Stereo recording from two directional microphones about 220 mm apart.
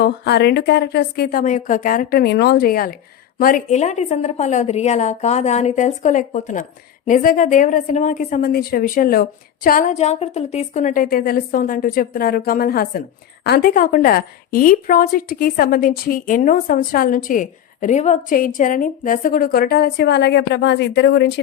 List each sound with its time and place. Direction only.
0.0 s a woman's voice: 50° left (ahead or behind)